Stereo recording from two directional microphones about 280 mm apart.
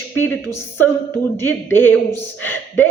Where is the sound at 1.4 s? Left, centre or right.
Centre.